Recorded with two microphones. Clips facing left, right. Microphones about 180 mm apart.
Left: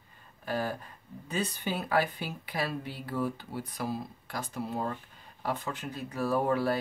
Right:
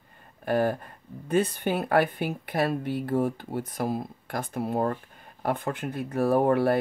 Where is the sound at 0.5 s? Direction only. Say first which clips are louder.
Right 8 dB; 55° right (ahead or behind).